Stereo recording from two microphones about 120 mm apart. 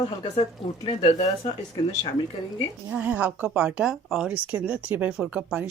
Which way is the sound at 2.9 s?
15° right (ahead or behind).